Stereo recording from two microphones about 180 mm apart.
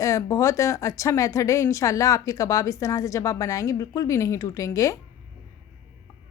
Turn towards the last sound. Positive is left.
turn(degrees=15)  # may be behind; listen again after turning